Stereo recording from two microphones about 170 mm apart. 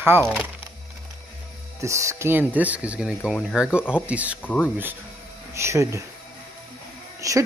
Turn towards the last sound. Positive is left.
turn(degrees=-20)  # may be behind; listen again after turning